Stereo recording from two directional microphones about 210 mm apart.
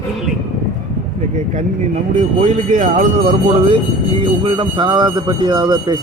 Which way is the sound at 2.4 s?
35° right (ahead or behind).